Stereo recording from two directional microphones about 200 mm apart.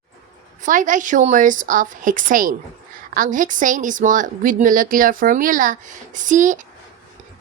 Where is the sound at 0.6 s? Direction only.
40° right (ahead or behind).